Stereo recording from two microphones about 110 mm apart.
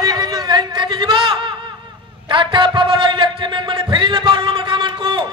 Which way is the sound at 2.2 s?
45° right (ahead or behind).